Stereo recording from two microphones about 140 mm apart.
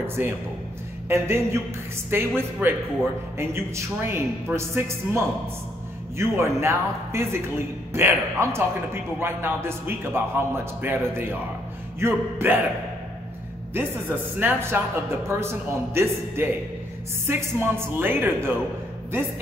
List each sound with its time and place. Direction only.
0.0 s a man's voice: 15° right (ahead or behind)
13.7 s speech: 15° right (ahead or behind)